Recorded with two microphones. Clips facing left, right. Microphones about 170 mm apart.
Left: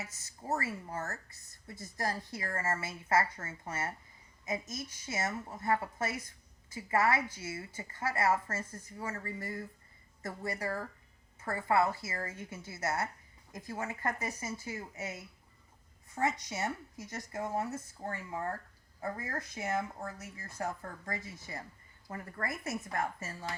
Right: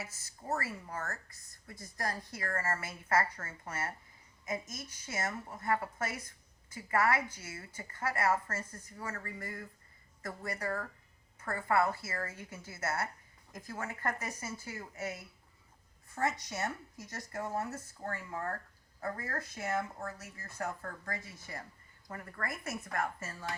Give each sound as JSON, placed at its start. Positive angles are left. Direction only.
{"t": 0.0, "sound": "a woman's voice", "side_deg": 20}
{"t": 16.2, "sound": "a woman's voice", "side_deg": 20}